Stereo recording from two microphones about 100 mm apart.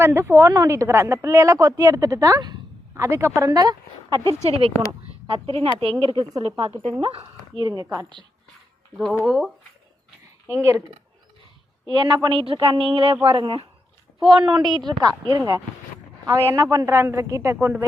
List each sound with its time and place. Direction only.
0.0 s speech: 25° right (ahead or behind); by 2.6 s 40° right (ahead or behind)
2.9 s a woman's voice: 25° right (ahead or behind)
4.4 s speech: 90° right
5.3 s speech: 75° right (ahead or behind)
5.6 s a woman's voice: 55° right (ahead or behind)
7.0 s speech: 80° right
7.7 s a woman's voice: 35° right (ahead or behind)
9.2 s speech: 5° left (ahead or behind)
10.5 s speech: 30° right (ahead or behind)
11.9 s a woman's voice: 45° right (ahead or behind)
16.2 s speech: 30° right (ahead or behind)